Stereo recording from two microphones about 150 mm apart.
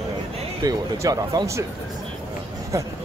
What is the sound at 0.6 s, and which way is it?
Speech, 25° right (ahead or behind).